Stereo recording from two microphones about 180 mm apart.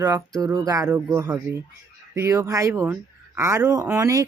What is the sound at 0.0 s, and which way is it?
Speech, 20° right (ahead or behind).